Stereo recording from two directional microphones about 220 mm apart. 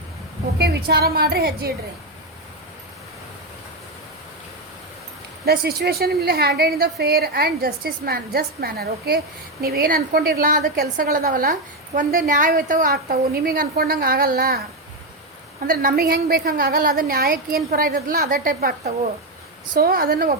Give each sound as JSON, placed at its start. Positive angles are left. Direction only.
{"t": 0.6, "sound": "a woman's voice", "side_deg": -45}
{"t": 5.5, "sound": "a woman's voice", "side_deg": -45}
{"t": 15.6, "sound": "a woman's voice", "side_deg": -40}
{"t": 19.8, "sound": "a woman's voice", "side_deg": -45}